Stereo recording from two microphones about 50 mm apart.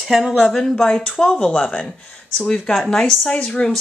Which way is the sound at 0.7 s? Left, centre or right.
Centre.